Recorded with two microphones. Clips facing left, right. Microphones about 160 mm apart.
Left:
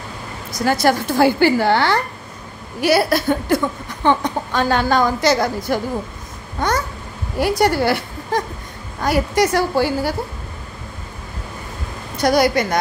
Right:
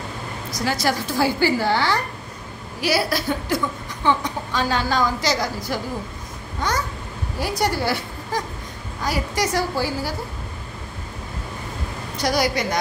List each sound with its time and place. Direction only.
0.7 s a woman's voice: 55° left (ahead or behind)
7.3 s a woman's voice: 65° left (ahead or behind)
12.2 s a woman's voice: 55° left (ahead or behind)